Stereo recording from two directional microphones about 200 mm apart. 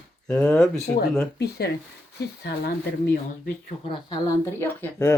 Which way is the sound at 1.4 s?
55° left (ahead or behind).